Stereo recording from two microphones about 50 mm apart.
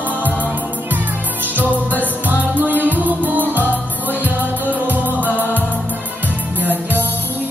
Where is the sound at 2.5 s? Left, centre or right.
Right.